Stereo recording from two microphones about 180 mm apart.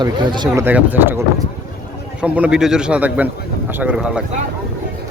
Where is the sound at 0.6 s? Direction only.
10° right (ahead or behind).